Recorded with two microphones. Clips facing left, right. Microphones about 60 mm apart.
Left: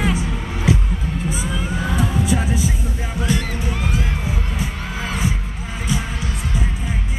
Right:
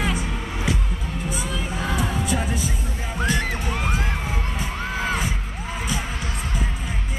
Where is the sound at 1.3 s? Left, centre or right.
Centre.